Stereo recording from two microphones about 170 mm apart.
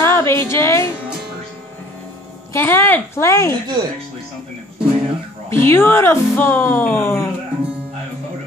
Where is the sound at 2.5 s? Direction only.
15° left (ahead or behind).